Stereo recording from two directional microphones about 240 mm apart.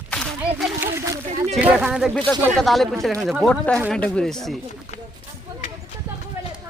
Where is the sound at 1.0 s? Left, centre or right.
Centre.